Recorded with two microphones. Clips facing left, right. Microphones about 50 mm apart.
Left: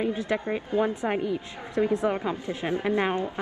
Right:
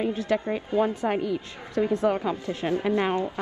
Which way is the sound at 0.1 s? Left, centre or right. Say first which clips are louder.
Right 2 dB; left.